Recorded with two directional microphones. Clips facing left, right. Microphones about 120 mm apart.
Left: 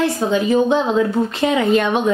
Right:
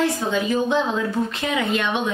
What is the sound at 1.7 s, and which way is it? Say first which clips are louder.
Speech: left 7 dB; 40° left (ahead or behind).